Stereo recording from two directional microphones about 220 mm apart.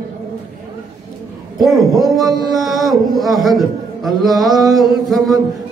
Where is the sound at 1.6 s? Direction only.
Centre (ahead or behind).